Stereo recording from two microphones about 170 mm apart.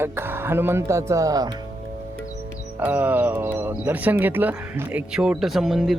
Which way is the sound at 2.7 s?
10° right (ahead or behind).